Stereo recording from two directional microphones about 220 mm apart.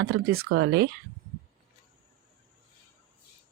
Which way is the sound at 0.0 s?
45° right (ahead or behind).